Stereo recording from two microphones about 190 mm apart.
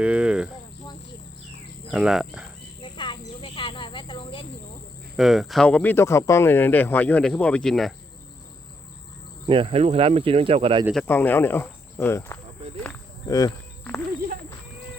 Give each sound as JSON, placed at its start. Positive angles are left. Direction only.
{"t": 0.0, "sound": "speech", "side_deg": -5}
{"t": 1.9, "sound": "speech", "side_deg": -5}
{"t": 2.8, "sound": "cricket", "side_deg": 25}
{"t": 5.1, "sound": "speech", "side_deg": 0}
{"t": 9.5, "sound": "speech", "side_deg": -30}
{"t": 10.9, "sound": "speech", "side_deg": 10}
{"t": 12.8, "sound": "a sound", "side_deg": 10}